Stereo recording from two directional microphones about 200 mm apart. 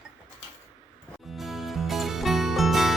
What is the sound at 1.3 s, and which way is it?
Music, centre (ahead or behind).